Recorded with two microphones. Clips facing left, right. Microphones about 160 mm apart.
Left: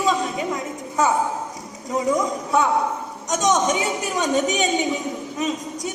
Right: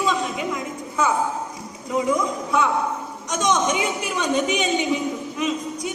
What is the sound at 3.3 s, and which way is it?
A man's voice, 40° left (ahead or behind).